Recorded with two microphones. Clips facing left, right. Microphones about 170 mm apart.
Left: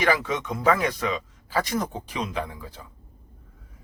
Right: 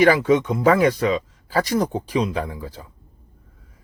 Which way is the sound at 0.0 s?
30° right (ahead or behind).